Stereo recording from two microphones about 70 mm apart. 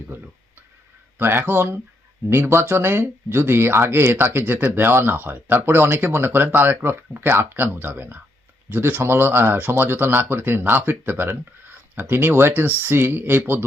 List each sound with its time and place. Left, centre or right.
0.1 s speech: right